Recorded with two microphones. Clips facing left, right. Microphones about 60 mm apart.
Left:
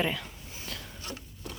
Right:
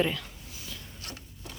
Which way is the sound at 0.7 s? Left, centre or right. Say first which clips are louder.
Left 4 dB; left.